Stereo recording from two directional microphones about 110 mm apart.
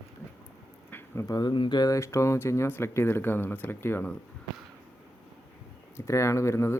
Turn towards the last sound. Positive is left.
turn(degrees=25)  # may be behind; listen again after turning